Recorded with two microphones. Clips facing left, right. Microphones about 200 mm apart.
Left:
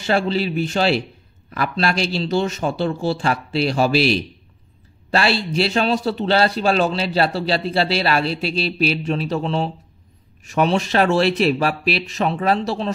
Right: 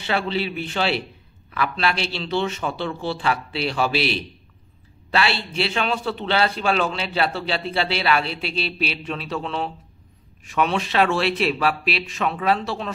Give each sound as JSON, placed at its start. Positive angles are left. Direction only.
{"t": 0.0, "sound": "a man's voice", "side_deg": 40}